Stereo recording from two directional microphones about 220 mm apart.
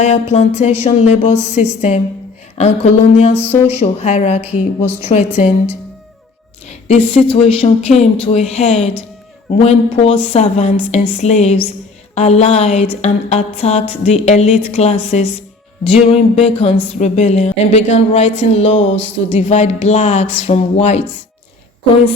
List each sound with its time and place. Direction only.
0.0 s speech: 30° left (ahead or behind)
2.6 s speech: 30° left (ahead or behind)
4.4 s a woman's voice: 90° left
5.0 s speech: 30° left (ahead or behind)
6.7 s a woman's voice: 30° left (ahead or behind)